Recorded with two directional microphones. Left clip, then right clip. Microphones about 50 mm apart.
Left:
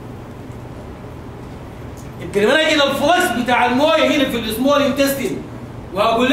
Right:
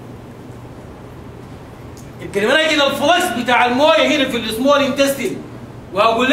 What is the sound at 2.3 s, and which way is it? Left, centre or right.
Speech, centre.